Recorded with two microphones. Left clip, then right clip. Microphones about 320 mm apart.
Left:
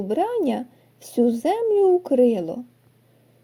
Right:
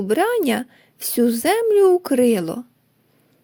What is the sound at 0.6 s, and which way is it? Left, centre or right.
Speech, right.